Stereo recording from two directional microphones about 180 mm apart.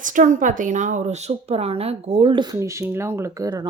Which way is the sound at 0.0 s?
45° right (ahead or behind).